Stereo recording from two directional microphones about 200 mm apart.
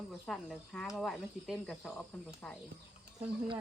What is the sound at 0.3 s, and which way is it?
Speech, 5° left (ahead or behind).